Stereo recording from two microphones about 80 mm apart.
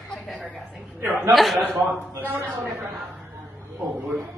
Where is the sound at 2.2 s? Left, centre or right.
Right.